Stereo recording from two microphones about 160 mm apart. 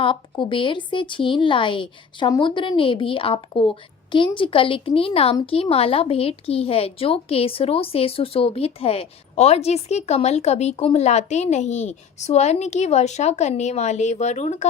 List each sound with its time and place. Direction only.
0.0 s a woman's voice: 30° left (ahead or behind)